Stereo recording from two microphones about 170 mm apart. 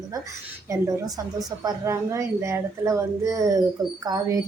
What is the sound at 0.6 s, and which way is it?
Speech, 20° right (ahead or behind).